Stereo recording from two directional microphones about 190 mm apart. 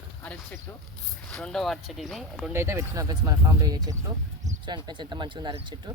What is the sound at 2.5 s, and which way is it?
Speech, 15° right (ahead or behind).